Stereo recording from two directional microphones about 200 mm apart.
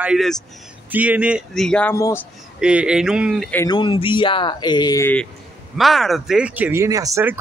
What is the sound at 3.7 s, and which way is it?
Speech, 25° left (ahead or behind).